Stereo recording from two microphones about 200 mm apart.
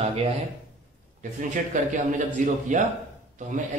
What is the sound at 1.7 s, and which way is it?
A man's voice, 40° right (ahead or behind).